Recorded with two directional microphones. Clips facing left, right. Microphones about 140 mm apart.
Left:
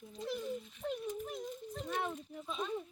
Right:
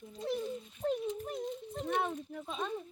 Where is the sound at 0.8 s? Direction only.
40° right (ahead or behind).